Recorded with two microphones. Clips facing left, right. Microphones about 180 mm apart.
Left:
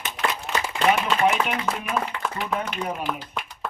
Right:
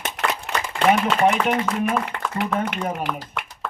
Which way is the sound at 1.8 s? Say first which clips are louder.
Right 4 dB; 55° right (ahead or behind).